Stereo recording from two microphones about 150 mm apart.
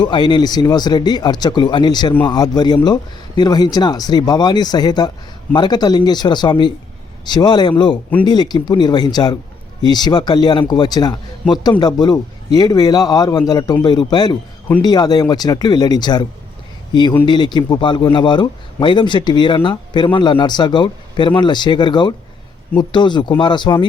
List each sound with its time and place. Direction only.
0.0 s a man's voice: 30° left (ahead or behind)